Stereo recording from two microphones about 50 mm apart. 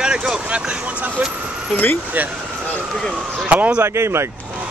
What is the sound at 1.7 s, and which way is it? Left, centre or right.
Speech, left.